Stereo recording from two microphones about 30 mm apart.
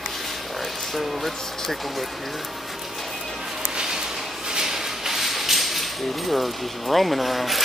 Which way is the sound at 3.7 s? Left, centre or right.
Right.